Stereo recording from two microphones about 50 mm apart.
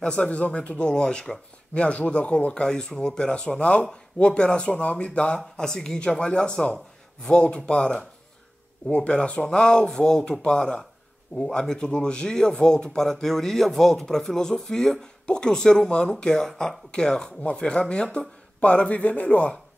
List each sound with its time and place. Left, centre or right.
0.0 s speech: left